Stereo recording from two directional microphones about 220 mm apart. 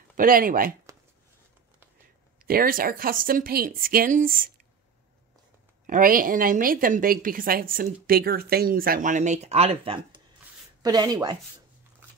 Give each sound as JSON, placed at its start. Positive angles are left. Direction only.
{"t": 0.2, "sound": "a woman's voice", "side_deg": -40}
{"t": 2.4, "sound": "a woman's voice", "side_deg": -40}
{"t": 5.9, "sound": "a woman's voice", "side_deg": -40}